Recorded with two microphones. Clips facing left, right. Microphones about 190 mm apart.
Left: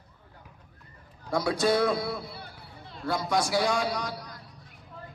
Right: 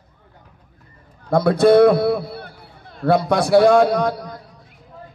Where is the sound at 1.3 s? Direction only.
55° right (ahead or behind).